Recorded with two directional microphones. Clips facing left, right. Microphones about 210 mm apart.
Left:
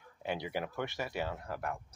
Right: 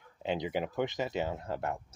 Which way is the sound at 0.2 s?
20° right (ahead or behind).